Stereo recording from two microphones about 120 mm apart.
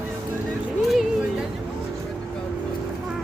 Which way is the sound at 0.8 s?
Centre (ahead or behind).